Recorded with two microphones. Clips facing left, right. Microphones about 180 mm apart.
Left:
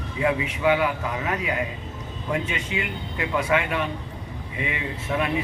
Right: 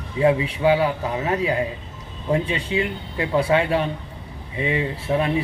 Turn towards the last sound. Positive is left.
turn(degrees=-30)  # may be behind; listen again after turning